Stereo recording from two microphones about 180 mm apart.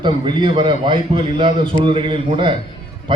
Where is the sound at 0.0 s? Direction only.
25° right (ahead or behind).